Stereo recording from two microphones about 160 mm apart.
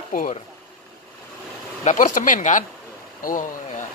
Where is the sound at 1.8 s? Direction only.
50° left (ahead or behind).